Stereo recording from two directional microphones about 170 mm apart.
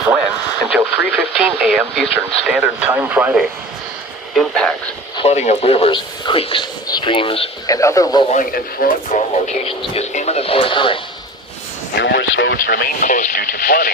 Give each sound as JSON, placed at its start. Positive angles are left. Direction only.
{"t": 0.8, "sound": "speech", "side_deg": -10}
{"t": 4.4, "sound": "speech", "side_deg": 5}
{"t": 5.1, "sound": "speech", "side_deg": 40}
{"t": 7.7, "sound": "speech", "side_deg": 20}
{"t": 8.3, "sound": "speech", "side_deg": 55}
{"t": 9.1, "sound": "speech", "side_deg": 35}
{"t": 11.9, "sound": "speech", "side_deg": 90}
{"t": 12.6, "sound": "speech", "side_deg": 55}